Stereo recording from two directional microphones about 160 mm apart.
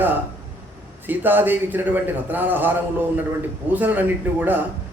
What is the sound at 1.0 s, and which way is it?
A man's voice, 10° right (ahead or behind).